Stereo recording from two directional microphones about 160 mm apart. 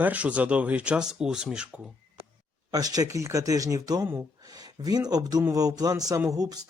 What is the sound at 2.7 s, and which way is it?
Speech, 25° right (ahead or behind).